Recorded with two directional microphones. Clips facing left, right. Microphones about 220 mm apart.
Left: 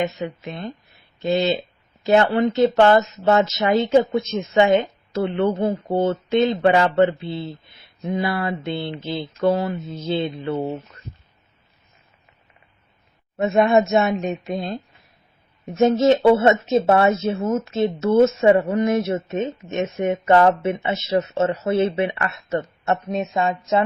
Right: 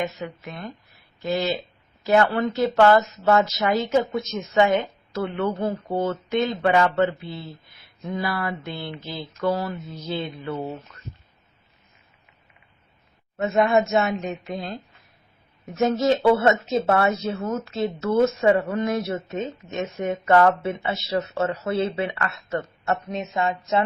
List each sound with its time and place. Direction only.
0.0 s speech: 25° left (ahead or behind)
13.3 s speech: 25° left (ahead or behind)